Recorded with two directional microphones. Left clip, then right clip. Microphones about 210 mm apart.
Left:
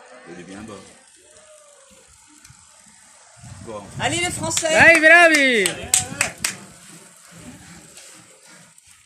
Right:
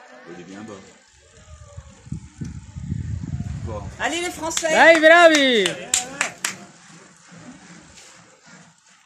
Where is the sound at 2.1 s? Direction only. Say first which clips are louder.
Right 12 dB; 40° left (ahead or behind).